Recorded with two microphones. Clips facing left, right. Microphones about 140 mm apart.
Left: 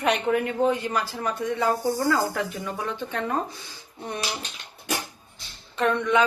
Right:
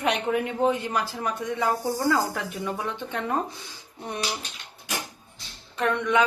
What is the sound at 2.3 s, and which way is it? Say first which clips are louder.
Speech: left 1 dB; 15° right (ahead or behind).